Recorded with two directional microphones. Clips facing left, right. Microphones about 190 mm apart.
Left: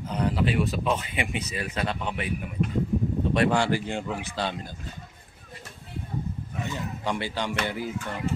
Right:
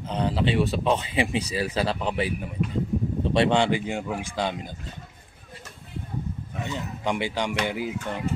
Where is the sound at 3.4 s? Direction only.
20° right (ahead or behind).